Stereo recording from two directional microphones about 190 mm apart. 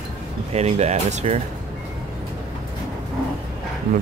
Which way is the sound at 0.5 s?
35° right (ahead or behind).